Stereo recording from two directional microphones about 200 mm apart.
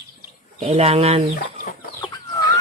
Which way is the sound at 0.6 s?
30° right (ahead or behind).